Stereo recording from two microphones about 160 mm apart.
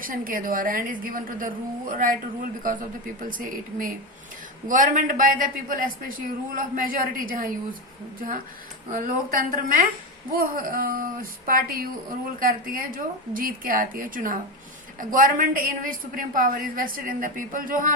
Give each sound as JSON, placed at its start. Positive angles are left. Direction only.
{"t": 0.0, "sound": "a man's voice", "side_deg": -60}
{"t": 3.2, "sound": "a man's voice", "side_deg": -60}
{"t": 8.9, "sound": "a man's voice", "side_deg": -60}